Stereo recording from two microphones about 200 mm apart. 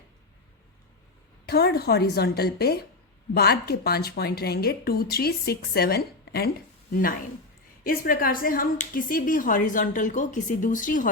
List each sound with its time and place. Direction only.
1.5 s a woman's voice: 55° left (ahead or behind)
7.9 s speech: 45° left (ahead or behind)